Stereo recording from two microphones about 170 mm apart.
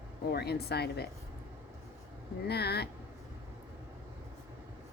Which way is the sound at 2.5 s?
70° left (ahead or behind).